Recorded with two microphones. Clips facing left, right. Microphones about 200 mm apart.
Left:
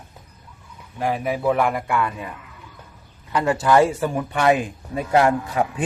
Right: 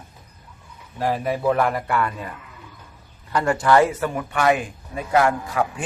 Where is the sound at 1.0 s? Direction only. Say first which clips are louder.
Even; 10° left (ahead or behind).